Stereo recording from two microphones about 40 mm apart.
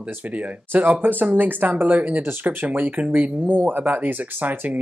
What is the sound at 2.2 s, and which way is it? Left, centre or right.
Speech, right.